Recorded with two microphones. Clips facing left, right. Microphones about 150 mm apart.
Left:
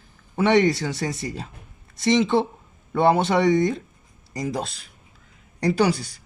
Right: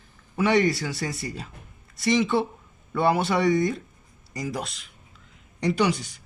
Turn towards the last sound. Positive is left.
turn(degrees=35)  # may be behind; listen again after turning